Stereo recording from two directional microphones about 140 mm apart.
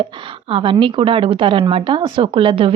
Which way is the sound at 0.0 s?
35° right (ahead or behind).